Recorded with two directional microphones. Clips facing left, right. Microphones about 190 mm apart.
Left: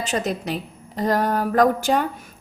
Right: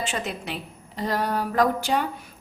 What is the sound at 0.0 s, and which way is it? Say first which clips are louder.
A woman's voice: left 5 dB; 40° left (ahead or behind).